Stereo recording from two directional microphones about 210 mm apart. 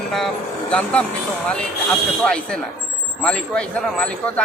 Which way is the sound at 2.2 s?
5° left (ahead or behind).